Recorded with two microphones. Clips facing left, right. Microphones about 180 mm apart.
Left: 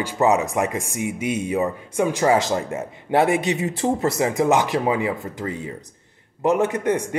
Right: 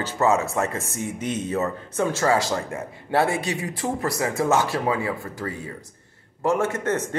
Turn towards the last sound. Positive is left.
turn(degrees=15)  # may be behind; listen again after turning